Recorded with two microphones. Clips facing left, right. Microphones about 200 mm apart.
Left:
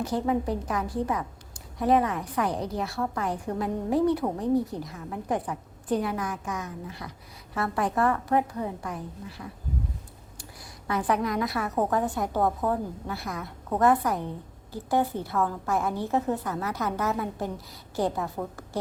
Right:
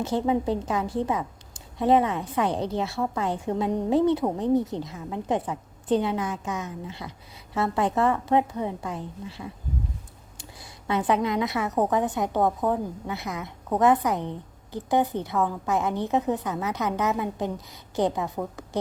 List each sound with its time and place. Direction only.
0.0 s a woman's voice: 25° right (ahead or behind)